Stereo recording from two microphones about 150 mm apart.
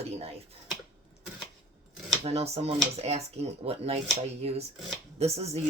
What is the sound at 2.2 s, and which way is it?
Speech, 45° right (ahead or behind).